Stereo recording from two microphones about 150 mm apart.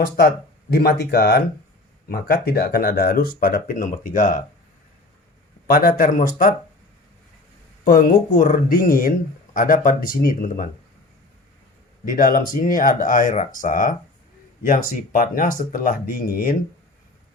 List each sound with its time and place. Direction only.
0.7 s speech: 90° left; by 4.4 s 60° left (ahead or behind)
5.6 s speech: 80° left
7.9 s speech: 75° left (ahead or behind)
12.0 s speech: 65° left (ahead or behind)